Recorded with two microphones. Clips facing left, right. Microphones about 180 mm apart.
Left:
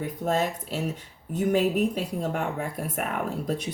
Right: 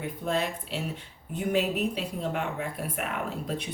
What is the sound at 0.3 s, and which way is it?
Speech, 45° left (ahead or behind).